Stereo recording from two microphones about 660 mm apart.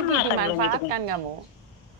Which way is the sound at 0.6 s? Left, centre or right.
Right.